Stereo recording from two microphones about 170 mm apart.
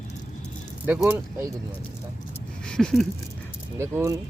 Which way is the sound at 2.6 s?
5° left (ahead or behind).